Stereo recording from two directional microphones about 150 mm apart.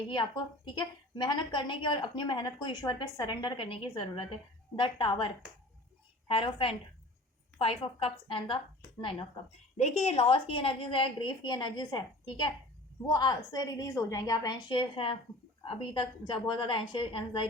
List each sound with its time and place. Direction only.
0.1 s a woman's voice: 30° left (ahead or behind)
9.7 s a woman's voice: 50° left (ahead or behind); by 17.5 s 35° left (ahead or behind)